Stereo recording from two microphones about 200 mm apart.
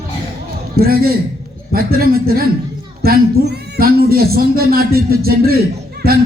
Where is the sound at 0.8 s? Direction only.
50° right (ahead or behind).